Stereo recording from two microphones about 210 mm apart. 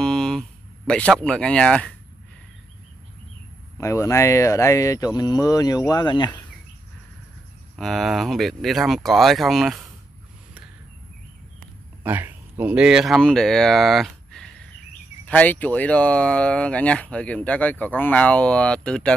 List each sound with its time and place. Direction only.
0.0 s speech: 5° left (ahead or behind)
3.7 s speech: 15° left (ahead or behind)
7.7 s speech: centre (ahead or behind)
12.0 s speech: 10° right (ahead or behind)